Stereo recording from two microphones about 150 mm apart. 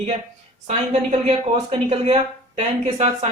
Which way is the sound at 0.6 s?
50° right (ahead or behind).